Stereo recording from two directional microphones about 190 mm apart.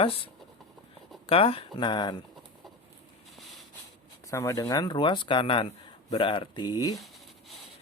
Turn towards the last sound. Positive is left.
turn(degrees=20)  # may be behind; listen again after turning